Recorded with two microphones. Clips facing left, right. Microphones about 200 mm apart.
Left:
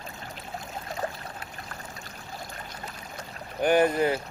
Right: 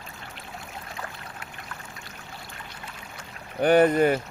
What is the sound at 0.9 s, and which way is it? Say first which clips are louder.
Boat: left 9 dB; 35° left (ahead or behind).